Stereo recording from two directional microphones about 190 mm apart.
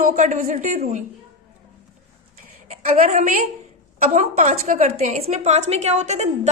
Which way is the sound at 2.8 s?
45° right (ahead or behind).